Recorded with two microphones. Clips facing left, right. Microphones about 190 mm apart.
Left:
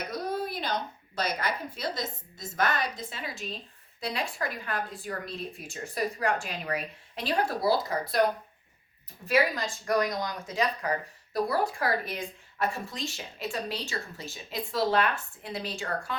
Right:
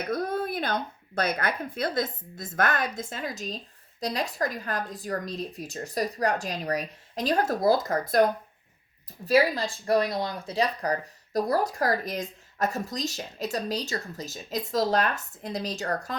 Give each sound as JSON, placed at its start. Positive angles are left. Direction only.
{"t": 0.1, "sound": "a woman's voice", "side_deg": -50}
{"t": 9.2, "sound": "speech", "side_deg": -35}